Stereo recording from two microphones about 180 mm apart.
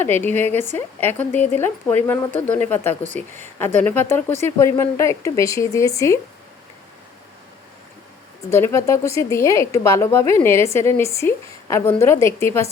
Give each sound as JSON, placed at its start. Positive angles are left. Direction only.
{"t": 0.0, "sound": "a woman's voice", "side_deg": 10}
{"t": 8.4, "sound": "a woman's voice", "side_deg": 15}